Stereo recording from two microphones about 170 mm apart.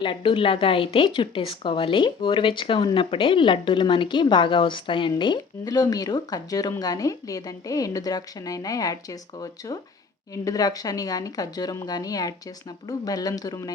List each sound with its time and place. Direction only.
0.0 s a woman's voice: 30° left (ahead or behind)